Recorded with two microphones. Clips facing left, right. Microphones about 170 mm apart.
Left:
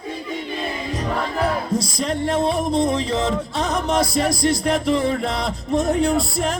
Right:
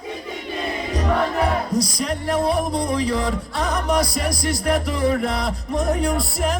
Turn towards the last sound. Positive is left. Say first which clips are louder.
# left 2 dB
turn(degrees=25)  # may be behind; listen again after turning